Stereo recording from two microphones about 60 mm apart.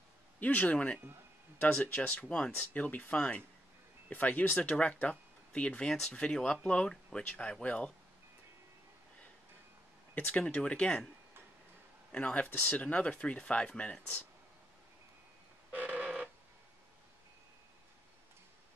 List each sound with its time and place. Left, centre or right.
0.4 s speech: left
10.1 s speech: left
10.4 s speech: centre
12.1 s speech: left
15.7 s telephone: right